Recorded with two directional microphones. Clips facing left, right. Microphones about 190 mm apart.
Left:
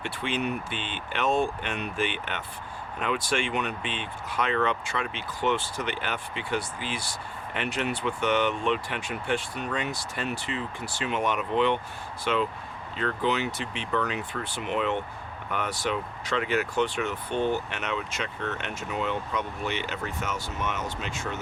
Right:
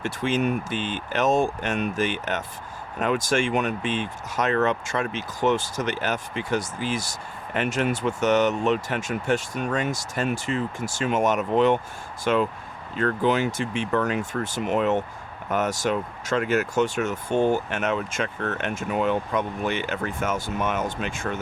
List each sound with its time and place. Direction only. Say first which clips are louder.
0.0 s speech: right 6 dB; 45° right (ahead or behind)